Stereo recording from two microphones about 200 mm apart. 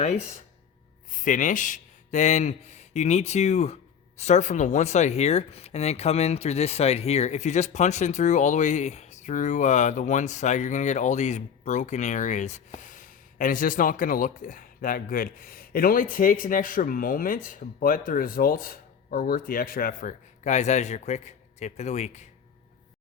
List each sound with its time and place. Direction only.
1.1 s speech: 40° left (ahead or behind)